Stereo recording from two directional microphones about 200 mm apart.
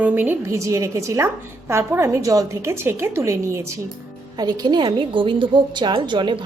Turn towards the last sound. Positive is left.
turn(degrees=-25)  # may be behind; listen again after turning